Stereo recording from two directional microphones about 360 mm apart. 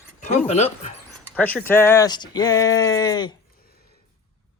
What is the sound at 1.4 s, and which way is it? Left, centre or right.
Speech, centre.